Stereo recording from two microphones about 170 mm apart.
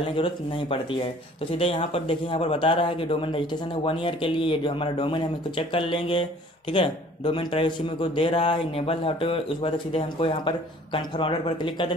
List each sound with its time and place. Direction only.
0.0 s speech: 30° left (ahead or behind)